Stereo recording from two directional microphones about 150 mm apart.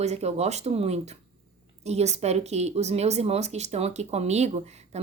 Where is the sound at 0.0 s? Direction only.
45° right (ahead or behind).